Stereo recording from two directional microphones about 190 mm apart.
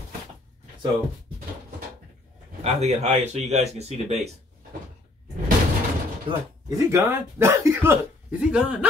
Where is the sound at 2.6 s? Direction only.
35° right (ahead or behind).